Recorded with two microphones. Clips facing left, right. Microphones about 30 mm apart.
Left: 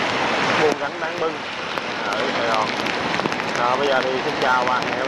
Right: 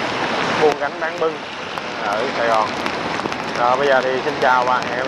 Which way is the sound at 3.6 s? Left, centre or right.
Centre.